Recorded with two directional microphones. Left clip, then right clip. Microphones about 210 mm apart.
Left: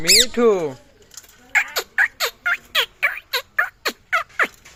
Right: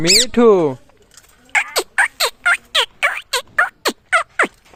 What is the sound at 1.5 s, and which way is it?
Turkey, 70° right (ahead or behind).